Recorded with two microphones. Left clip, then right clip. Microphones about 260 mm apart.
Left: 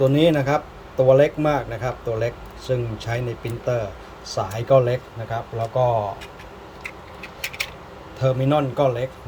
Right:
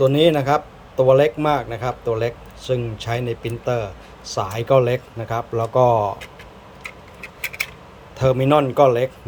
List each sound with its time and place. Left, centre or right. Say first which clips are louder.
0.0 s speech: right 2 dB; centre
5.8 s speech: right 4 dB; right
8.2 s speech: right 4 dB; centre